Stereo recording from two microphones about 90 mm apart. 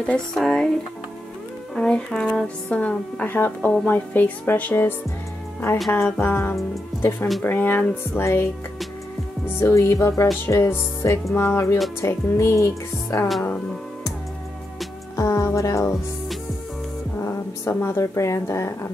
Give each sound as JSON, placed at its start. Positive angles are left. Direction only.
{"t": 0.0, "sound": "speech", "side_deg": 10}
{"t": 1.8, "sound": "speech", "side_deg": 10}
{"t": 6.0, "sound": "speech", "side_deg": 20}
{"t": 9.6, "sound": "speech", "side_deg": 30}
{"t": 15.1, "sound": "speech", "side_deg": 35}
{"t": 17.3, "sound": "speech", "side_deg": 25}